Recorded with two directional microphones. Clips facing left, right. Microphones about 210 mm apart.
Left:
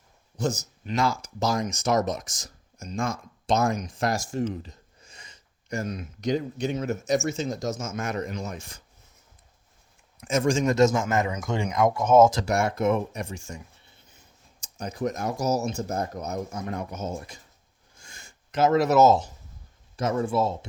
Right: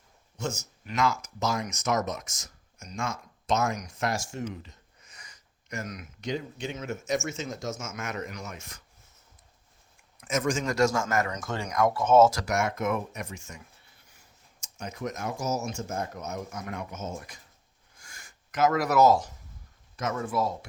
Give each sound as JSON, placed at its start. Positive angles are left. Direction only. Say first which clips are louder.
{"t": 0.3, "sound": "speech", "louder": "left 6 dB", "side_deg": 35}
{"t": 10.2, "sound": "a man's voice", "louder": "left 5 dB", "side_deg": 30}
{"t": 12.4, "sound": "speech", "louder": "left 4 dB", "side_deg": 30}
{"t": 14.6, "sound": "speech", "louder": "left 6 dB", "side_deg": 35}
{"t": 18.0, "sound": "gasp", "louder": "left 2 dB", "side_deg": 25}
{"t": 20.0, "sound": "speech", "louder": "left 5 dB", "side_deg": 30}